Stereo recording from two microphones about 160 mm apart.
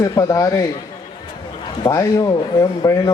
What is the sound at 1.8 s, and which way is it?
Speech, 20° left (ahead or behind).